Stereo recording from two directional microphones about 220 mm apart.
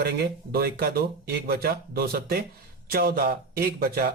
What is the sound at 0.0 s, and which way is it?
Speech, 45° right (ahead or behind).